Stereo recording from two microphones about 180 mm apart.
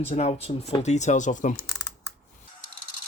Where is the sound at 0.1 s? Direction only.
40° left (ahead or behind).